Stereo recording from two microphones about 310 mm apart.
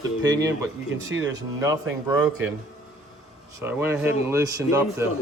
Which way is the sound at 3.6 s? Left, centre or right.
Centre.